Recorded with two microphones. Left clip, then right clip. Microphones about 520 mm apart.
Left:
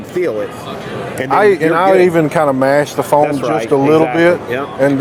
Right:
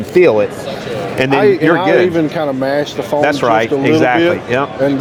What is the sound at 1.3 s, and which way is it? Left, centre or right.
Speech, left.